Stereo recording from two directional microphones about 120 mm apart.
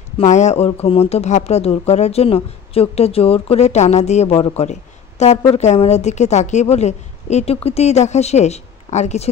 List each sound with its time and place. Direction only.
0.2 s a woman's voice: 75° left (ahead or behind)
0.7 s a woman's voice: 60° left (ahead or behind)